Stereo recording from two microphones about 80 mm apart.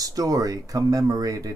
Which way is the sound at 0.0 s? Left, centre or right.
Right.